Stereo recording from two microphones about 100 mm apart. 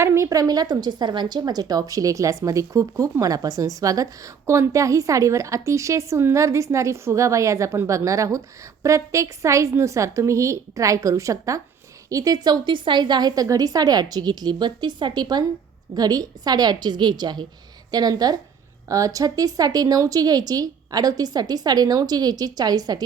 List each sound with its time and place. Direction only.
0.0 s a woman's voice: 30° right (ahead or behind)